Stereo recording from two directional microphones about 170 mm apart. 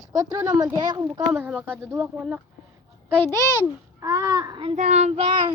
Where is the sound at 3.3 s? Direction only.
15° right (ahead or behind).